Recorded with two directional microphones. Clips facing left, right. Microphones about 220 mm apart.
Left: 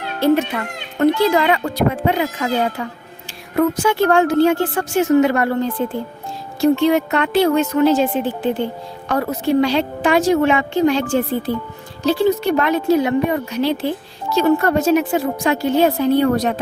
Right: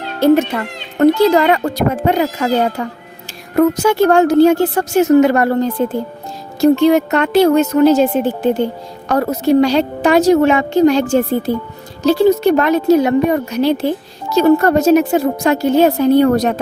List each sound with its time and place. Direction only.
0.2 s a woman's voice: 45° right (ahead or behind)